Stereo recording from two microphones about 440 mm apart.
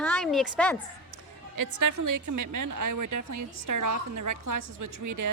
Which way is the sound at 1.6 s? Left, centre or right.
Right.